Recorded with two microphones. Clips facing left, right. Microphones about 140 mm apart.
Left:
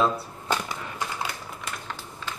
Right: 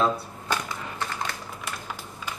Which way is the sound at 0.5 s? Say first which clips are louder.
Left 1 dB; 20° left (ahead or behind).